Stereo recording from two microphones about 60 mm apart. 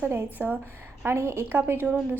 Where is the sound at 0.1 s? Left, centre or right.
Right.